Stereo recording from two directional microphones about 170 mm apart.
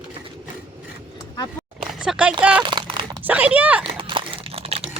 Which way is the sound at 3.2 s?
10° right (ahead or behind).